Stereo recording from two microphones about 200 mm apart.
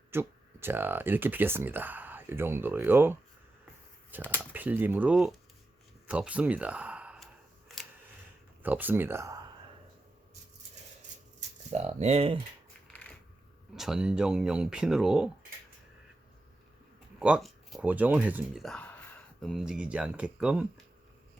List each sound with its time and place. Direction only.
0.1 s speech: 10° right (ahead or behind)
4.4 s speech: 10° right (ahead or behind)
8.6 s speech: 10° right (ahead or behind)
11.3 s speech: 35° right (ahead or behind)
12.9 s a sound: 5° left (ahead or behind)
13.7 s speech: centre (ahead or behind)
17.2 s speech: 5° right (ahead or behind)